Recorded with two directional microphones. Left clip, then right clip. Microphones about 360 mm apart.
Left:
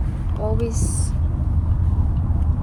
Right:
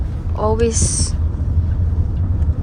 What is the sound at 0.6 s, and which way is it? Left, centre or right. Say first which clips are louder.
Speech: right 9 dB; right.